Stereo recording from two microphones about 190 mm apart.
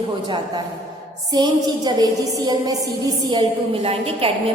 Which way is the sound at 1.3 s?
20° right (ahead or behind).